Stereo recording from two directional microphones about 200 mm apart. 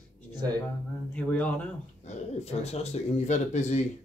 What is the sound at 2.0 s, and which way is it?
Speech, 35° left (ahead or behind).